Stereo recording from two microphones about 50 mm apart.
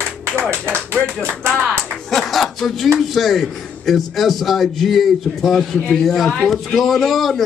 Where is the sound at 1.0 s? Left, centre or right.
Right.